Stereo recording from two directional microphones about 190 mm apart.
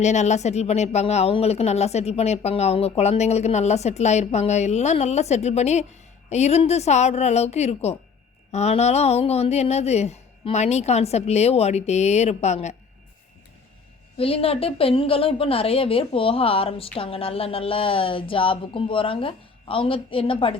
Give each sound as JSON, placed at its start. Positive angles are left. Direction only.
{"t": 0.0, "sound": "speech", "side_deg": 35}
{"t": 14.2, "sound": "a woman's voice", "side_deg": 30}